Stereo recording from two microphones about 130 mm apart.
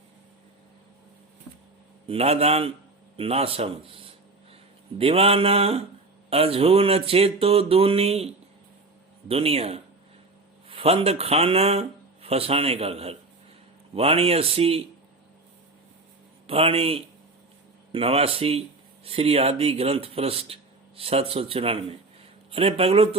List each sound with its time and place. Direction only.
2.0 s speech: 50° right (ahead or behind)
9.3 s speech: 50° right (ahead or behind)
16.5 s speech: 45° right (ahead or behind)